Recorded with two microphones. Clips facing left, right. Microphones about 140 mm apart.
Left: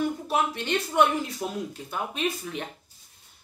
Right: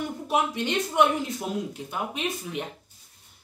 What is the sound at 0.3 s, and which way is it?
Speech, 15° right (ahead or behind).